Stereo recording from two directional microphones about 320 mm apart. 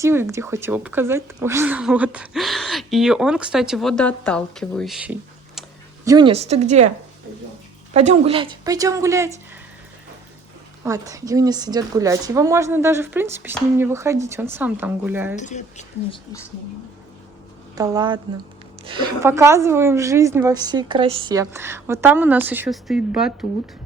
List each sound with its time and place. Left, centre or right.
0.0 s a woman's voice: centre
6.1 s speech: centre
7.9 s a woman's voice: centre
10.8 s a woman's voice: centre
15.4 s speech: left
17.7 s a woman's voice: centre